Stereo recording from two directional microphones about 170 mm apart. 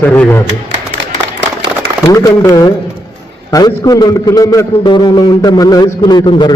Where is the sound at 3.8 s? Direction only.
25° left (ahead or behind).